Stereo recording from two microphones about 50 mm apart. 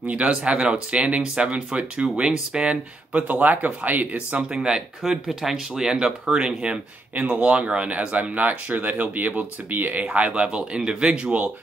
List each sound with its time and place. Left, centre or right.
0.0 s speech: right
4.4 s speech: centre
7.2 s speech: right
10.0 s speech: right